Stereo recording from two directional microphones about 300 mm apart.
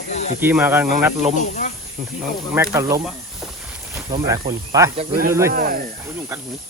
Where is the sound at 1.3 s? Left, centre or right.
Left.